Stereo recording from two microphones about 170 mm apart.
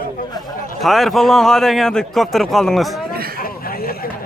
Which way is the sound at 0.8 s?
Centre (ahead or behind).